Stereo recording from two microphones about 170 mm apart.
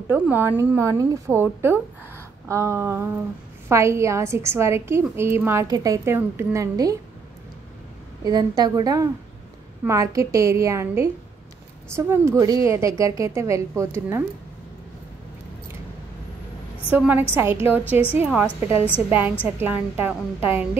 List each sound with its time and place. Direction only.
0.1 s a woman's voice: 10° right (ahead or behind)
8.2 s a woman's voice: 25° right (ahead or behind)
16.9 s a woman's voice: 10° right (ahead or behind)